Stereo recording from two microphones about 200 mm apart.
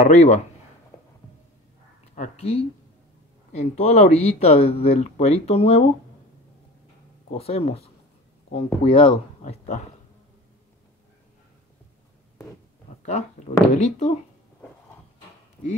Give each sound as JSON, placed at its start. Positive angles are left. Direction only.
{"t": 0.0, "sound": "speech", "side_deg": 35}
{"t": 2.1, "sound": "speech", "side_deg": 35}
{"t": 7.2, "sound": "speech", "side_deg": 30}
{"t": 13.0, "sound": "speech", "side_deg": 35}